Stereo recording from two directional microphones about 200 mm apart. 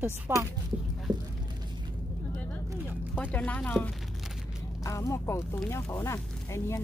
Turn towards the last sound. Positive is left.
turn(degrees=15)  # may be behind; listen again after turning